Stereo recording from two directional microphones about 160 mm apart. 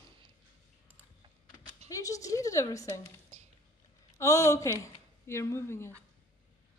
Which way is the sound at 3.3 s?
40° right (ahead or behind).